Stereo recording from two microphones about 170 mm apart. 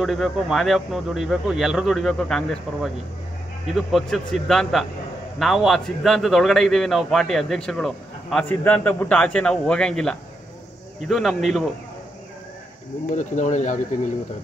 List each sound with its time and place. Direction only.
0.0 s a man's voice: centre (ahead or behind)
13.1 s speech: 45° left (ahead or behind)